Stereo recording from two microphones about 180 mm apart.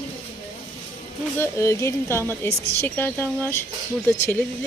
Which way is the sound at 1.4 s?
15° left (ahead or behind).